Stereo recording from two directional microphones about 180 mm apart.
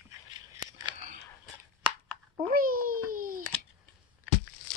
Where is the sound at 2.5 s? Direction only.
50° right (ahead or behind).